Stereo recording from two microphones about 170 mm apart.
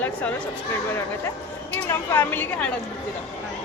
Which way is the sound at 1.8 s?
15° left (ahead or behind).